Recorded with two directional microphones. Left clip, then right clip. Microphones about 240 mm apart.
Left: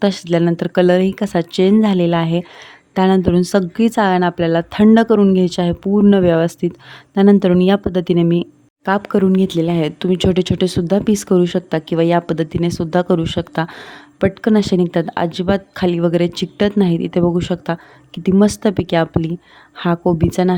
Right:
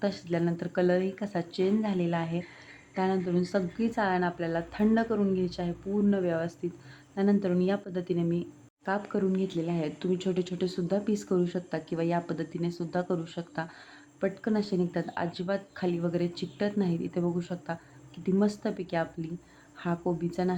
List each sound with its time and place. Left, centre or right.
0.0 s speech: left